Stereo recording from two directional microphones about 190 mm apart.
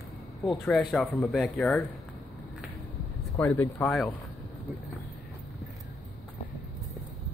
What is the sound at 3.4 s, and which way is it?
Speech, 10° left (ahead or behind).